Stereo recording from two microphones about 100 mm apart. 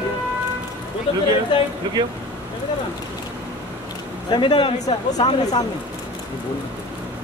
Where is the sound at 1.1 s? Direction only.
65° left (ahead or behind).